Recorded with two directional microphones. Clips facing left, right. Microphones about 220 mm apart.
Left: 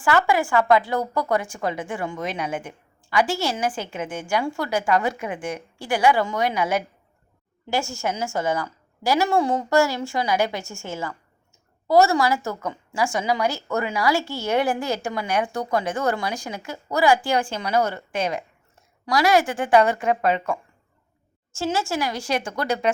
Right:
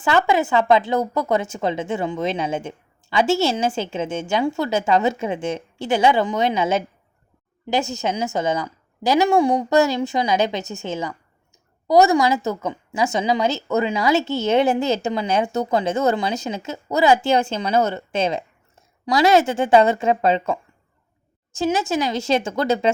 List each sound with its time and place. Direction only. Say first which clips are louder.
0.0 s a woman's voice: right 2 dB; 20° right (ahead or behind)